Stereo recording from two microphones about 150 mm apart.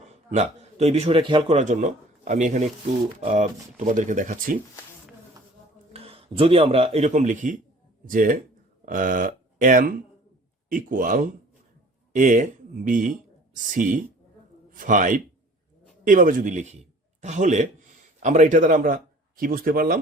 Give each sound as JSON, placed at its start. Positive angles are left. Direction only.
{"t": 0.0, "sound": "a man's voice", "side_deg": -45}
{"t": 5.9, "sound": "a man's voice", "side_deg": -40}